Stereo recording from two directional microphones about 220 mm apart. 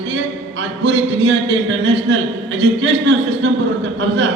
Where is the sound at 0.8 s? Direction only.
55° right (ahead or behind).